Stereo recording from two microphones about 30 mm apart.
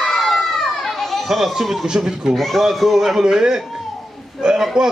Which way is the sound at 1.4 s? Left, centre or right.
Centre.